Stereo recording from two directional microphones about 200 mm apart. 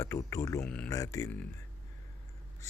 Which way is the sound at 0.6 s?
5° left (ahead or behind).